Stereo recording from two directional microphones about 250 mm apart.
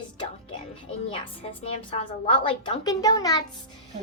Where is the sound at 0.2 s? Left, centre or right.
Left.